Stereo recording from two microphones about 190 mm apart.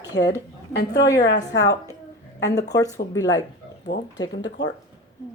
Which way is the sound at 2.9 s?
15° left (ahead or behind).